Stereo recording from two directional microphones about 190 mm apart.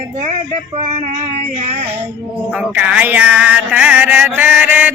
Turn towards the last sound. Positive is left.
turn(degrees=-10)  # may be behind; listen again after turning